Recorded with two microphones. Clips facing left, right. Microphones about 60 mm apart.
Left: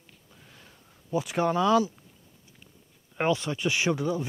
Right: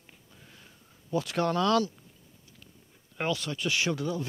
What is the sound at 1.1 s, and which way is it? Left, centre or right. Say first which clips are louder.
Speech: left 2 dB; centre.